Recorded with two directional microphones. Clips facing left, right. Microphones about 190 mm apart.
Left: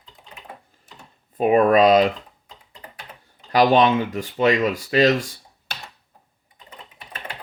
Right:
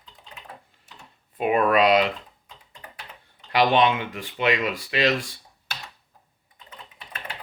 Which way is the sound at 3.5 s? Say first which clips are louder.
Left 4 dB; 40° left (ahead or behind).